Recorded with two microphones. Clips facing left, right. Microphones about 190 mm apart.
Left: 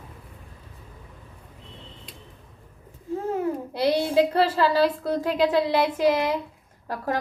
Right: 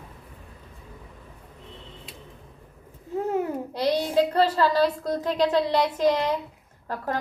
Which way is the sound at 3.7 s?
10° left (ahead or behind).